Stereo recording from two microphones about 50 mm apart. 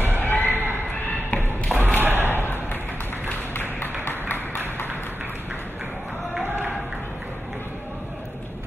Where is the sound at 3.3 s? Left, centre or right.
Left.